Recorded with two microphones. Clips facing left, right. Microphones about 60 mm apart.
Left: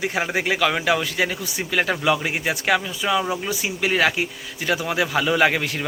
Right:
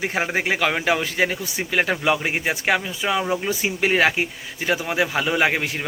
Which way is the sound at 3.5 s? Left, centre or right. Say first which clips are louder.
Right 2 dB; right.